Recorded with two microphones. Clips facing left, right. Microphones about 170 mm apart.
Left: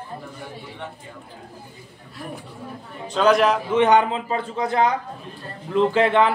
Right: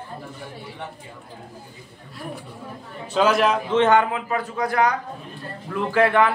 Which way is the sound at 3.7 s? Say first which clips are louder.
Even; 15° left (ahead or behind).